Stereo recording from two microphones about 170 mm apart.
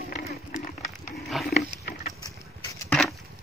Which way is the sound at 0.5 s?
50° left (ahead or behind).